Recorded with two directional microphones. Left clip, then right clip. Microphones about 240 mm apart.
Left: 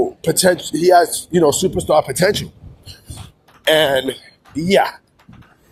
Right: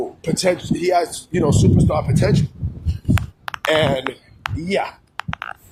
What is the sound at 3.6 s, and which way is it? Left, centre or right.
Speech, left.